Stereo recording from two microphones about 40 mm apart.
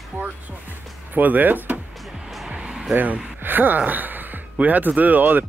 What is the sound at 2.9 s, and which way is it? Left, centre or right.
Speech, right.